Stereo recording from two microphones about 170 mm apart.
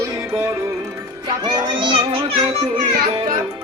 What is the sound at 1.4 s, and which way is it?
Children playing, 25° right (ahead or behind).